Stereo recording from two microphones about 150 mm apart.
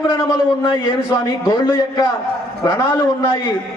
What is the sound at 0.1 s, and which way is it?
A man's voice, 25° left (ahead or behind).